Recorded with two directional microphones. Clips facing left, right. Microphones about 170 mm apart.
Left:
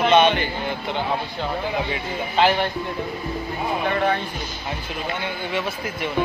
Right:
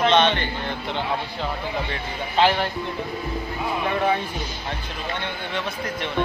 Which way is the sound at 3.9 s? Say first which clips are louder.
Even; 5° right (ahead or behind).